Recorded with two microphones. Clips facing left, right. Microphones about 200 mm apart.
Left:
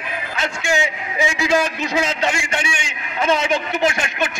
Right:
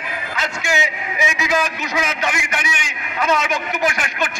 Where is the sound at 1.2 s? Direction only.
30° left (ahead or behind).